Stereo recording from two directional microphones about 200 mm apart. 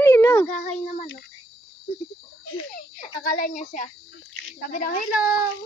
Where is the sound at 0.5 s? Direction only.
35° left (ahead or behind).